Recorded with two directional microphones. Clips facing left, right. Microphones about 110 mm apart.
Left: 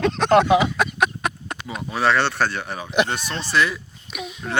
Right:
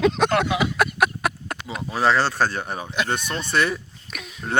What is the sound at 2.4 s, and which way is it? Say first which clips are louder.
Speech: even; 40° right (ahead or behind).